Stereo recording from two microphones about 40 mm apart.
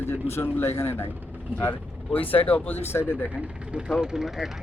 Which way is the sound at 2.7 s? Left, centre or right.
Left.